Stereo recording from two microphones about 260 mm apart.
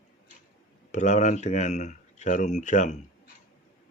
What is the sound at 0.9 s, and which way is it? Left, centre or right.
Speech, left.